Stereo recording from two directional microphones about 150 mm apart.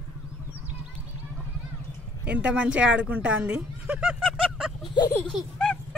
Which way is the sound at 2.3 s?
10° right (ahead or behind).